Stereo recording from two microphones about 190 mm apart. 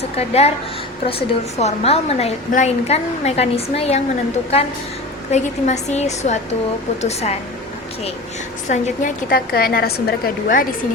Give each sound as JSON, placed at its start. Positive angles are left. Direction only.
{"t": 0.2, "sound": "a woman's voice", "side_deg": 35}
{"t": 5.3, "sound": "a woman's voice", "side_deg": 35}
{"t": 8.7, "sound": "a woman's voice", "side_deg": 45}